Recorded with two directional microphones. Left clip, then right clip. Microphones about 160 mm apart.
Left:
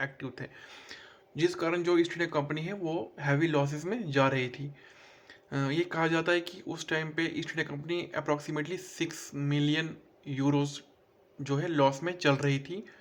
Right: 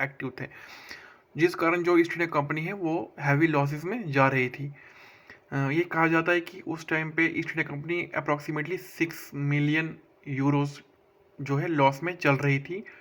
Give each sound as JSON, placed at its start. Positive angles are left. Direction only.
{"t": 0.0, "sound": "speech", "side_deg": -25}